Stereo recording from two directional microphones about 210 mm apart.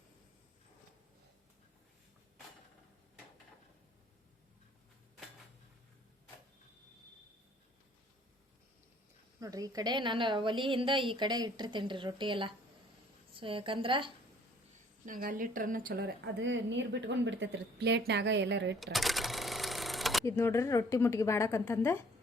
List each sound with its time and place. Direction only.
9.4 s a woman's voice: 15° right (ahead or behind)
15.0 s a woman's voice: 40° right (ahead or behind); by 18.8 s 55° right (ahead or behind)
18.8 s sewing machine: centre (ahead or behind)
20.2 s a woman's voice: 10° left (ahead or behind)